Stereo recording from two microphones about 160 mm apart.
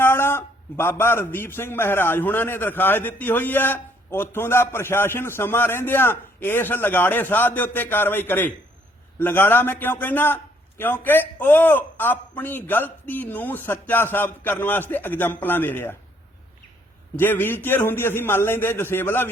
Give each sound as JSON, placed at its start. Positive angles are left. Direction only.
{"t": 0.0, "sound": "a man's voice", "side_deg": 15}
{"t": 17.2, "sound": "a man's voice", "side_deg": 15}